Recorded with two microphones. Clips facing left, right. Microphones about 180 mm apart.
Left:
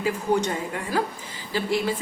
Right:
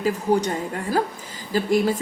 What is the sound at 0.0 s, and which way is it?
A woman's voice, 40° right (ahead or behind).